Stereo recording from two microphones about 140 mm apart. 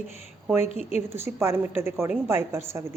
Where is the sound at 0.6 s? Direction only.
50° left (ahead or behind).